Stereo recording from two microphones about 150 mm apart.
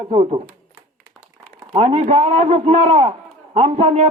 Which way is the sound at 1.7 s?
40° right (ahead or behind).